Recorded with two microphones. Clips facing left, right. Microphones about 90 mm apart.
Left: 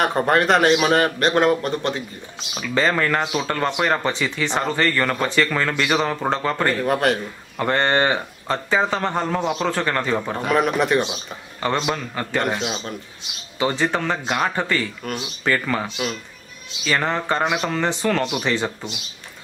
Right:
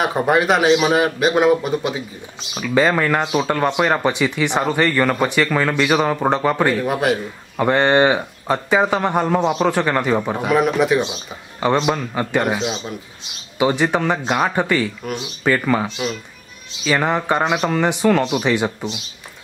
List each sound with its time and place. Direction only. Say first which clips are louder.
0.0 s speech: right 1 dB; 5° right (ahead or behind)
11.8 s speech: right 5 dB; 15° right (ahead or behind)
13.6 s speech: right 4 dB; 15° right (ahead or behind)